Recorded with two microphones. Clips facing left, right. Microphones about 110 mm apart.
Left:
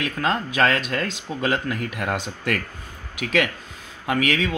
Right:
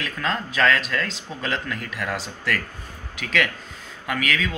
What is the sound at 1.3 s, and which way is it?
Speech, 20° left (ahead or behind).